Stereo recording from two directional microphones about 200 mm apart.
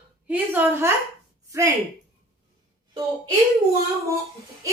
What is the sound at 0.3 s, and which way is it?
Speech, 10° right (ahead or behind).